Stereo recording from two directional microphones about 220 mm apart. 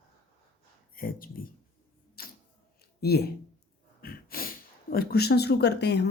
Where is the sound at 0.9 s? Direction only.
40° left (ahead or behind).